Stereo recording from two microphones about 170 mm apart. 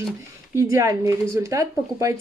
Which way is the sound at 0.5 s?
15° right (ahead or behind).